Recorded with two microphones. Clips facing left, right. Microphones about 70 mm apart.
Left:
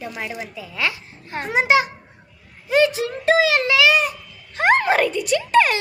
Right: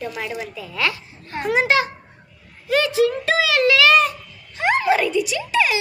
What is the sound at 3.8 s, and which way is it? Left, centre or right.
Babbling, centre.